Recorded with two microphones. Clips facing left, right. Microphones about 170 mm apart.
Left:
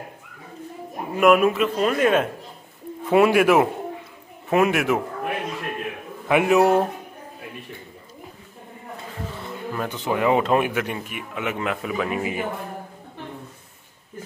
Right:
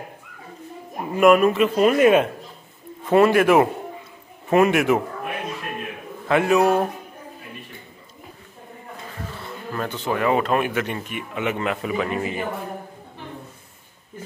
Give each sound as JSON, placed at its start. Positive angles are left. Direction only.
{"t": 1.1, "sound": "a man's voice", "side_deg": 5}
{"t": 1.8, "sound": "speech", "side_deg": -10}
{"t": 3.1, "sound": "a man's voice", "side_deg": 5}
{"t": 6.2, "sound": "speech", "side_deg": 15}
{"t": 9.4, "sound": "speech", "side_deg": 10}
{"t": 10.7, "sound": "a man's voice", "side_deg": 5}